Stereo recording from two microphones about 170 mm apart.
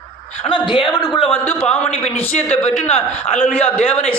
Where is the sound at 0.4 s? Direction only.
30° left (ahead or behind).